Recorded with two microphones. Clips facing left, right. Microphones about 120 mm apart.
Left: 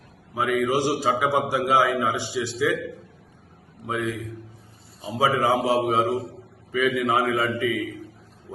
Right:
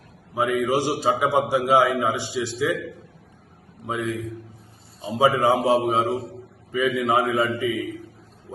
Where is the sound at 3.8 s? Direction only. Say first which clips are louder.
Even; 20° right (ahead or behind).